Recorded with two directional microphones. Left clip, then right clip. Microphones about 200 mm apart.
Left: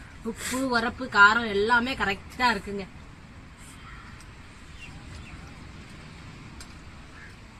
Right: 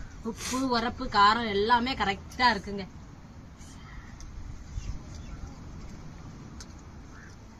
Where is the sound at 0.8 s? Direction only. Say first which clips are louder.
Left 4 dB; 15° left (ahead or behind).